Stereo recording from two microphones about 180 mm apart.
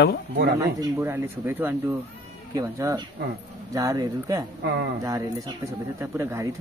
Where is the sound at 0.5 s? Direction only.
15° right (ahead or behind).